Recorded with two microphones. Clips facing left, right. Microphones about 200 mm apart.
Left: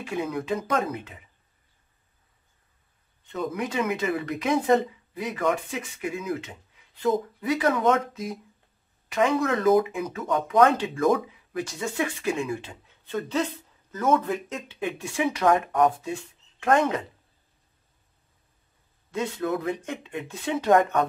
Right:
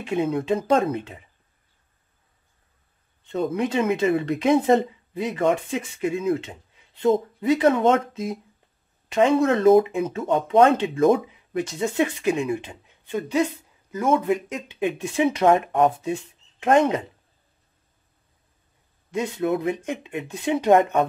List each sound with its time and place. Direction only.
0.0 s speech: 25° right (ahead or behind)
3.3 s speech: 25° right (ahead or behind)
19.1 s speech: 15° right (ahead or behind)